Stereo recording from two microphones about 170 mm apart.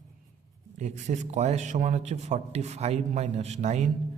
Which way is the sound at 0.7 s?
45° right (ahead or behind).